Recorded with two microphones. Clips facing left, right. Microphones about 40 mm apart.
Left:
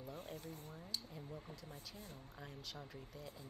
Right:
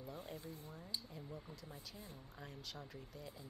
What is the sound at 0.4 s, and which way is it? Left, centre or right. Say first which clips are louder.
Speech: even; left.